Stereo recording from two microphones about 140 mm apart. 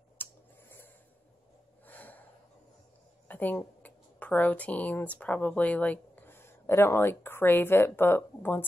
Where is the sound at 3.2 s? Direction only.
15° left (ahead or behind).